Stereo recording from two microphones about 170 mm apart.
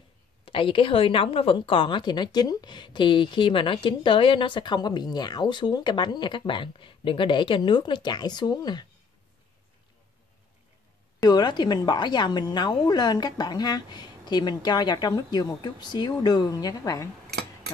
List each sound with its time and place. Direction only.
0.5 s a woman's voice: 30° left (ahead or behind)
11.1 s a woman's voice: 25° left (ahead or behind)